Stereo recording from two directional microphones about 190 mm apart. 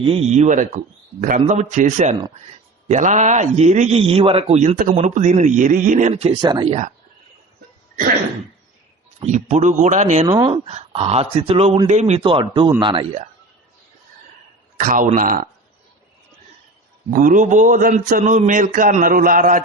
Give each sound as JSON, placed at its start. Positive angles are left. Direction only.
{"t": 0.0, "sound": "a man's voice", "side_deg": -30}
{"t": 6.4, "sound": "speech", "side_deg": -25}
{"t": 9.2, "sound": "a man's voice", "side_deg": -40}
{"t": 10.2, "sound": "speech", "side_deg": -25}
{"t": 14.8, "sound": "a man's voice", "side_deg": -45}
{"t": 17.1, "sound": "a man's voice", "side_deg": -45}